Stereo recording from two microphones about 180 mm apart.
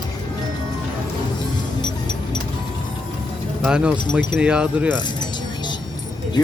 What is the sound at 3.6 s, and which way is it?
Speech, 5° right (ahead or behind).